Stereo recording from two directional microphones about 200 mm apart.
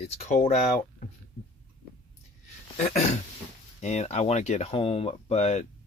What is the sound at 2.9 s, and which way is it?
Speech, 35° left (ahead or behind).